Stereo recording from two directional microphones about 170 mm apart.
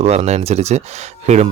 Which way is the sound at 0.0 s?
40° right (ahead or behind).